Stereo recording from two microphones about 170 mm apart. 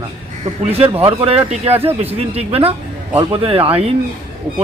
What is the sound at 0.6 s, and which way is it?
Speech, 35° right (ahead or behind).